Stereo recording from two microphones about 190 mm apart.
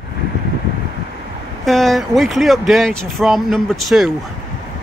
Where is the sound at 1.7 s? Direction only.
Centre (ahead or behind).